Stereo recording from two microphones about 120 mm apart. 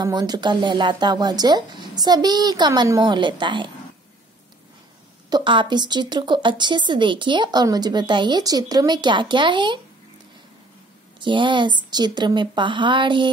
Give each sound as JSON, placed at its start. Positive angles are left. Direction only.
{"t": 0.0, "sound": "speech", "side_deg": -35}
{"t": 5.3, "sound": "speech", "side_deg": -40}
{"t": 11.1, "sound": "speech", "side_deg": -40}